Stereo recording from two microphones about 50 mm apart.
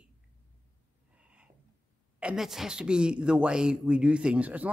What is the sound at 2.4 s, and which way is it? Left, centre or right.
Speech, centre.